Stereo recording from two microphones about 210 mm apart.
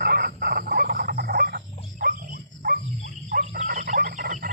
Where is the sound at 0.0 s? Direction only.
45° right (ahead or behind).